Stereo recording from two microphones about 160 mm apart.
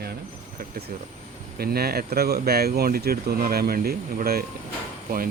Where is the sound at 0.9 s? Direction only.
70° right (ahead or behind).